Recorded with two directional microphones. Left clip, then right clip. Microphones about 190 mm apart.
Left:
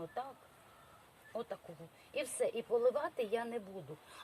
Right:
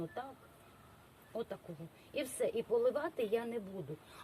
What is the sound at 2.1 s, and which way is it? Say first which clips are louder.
Speech: even; 25° left (ahead or behind).